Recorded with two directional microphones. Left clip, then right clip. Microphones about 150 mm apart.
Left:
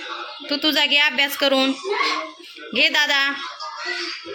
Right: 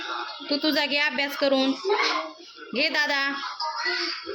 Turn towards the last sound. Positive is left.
turn(degrees=-45)  # may be behind; listen again after turning